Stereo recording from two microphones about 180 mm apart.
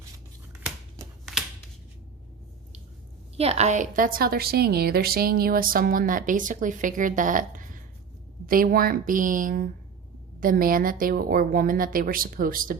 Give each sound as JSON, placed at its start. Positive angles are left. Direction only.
{"t": 3.3, "sound": "a woman's voice", "side_deg": -35}